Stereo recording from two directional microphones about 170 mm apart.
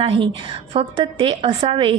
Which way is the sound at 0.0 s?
35° right (ahead or behind).